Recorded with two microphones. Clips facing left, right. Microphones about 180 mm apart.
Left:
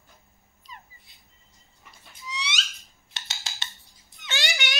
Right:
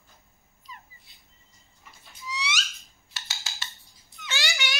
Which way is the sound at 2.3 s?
20° left (ahead or behind).